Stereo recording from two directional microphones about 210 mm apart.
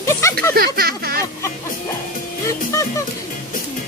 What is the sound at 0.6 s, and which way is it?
Speech, 45° right (ahead or behind).